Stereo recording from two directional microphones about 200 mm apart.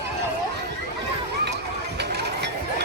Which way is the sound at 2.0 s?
55° right (ahead or behind).